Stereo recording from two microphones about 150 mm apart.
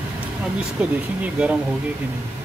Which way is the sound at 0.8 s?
5° right (ahead or behind).